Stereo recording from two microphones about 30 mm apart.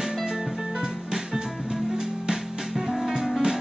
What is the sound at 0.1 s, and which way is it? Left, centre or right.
Music, centre.